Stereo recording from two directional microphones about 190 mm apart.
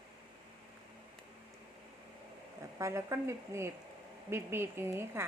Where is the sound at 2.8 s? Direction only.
15° right (ahead or behind).